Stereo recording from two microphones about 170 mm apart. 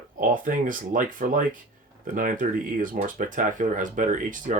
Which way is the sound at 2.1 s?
55° right (ahead or behind).